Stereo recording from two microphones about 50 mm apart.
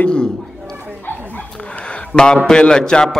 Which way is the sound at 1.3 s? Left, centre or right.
Left.